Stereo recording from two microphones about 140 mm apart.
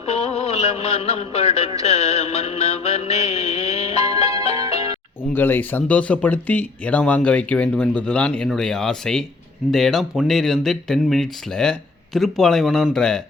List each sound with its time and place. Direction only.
0.0 s a sound: 50° left (ahead or behind)
0.8 s music: 50° left (ahead or behind)
5.3 s speech: 15° left (ahead or behind)